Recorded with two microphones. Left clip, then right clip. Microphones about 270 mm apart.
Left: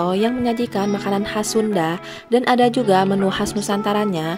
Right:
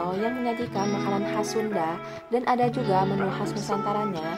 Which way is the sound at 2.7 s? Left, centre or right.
Left.